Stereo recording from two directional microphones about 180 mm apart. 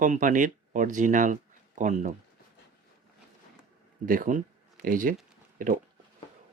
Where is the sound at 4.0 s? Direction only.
50° right (ahead or behind).